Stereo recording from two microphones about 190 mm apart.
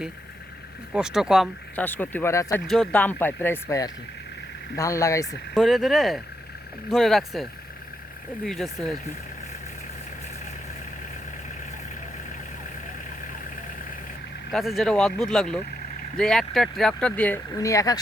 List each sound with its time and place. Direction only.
0.9 s speech: 5° right (ahead or behind)
1.7 s speech: 10° left (ahead or behind)
2.6 s speech: centre (ahead or behind)
5.5 s speech: centre (ahead or behind)
8.4 s speech: centre (ahead or behind)
14.5 s speech: centre (ahead or behind); by 17.9 s 15° left (ahead or behind)